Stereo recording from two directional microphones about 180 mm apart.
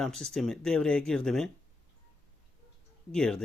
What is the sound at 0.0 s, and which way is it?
Speech, centre (ahead or behind).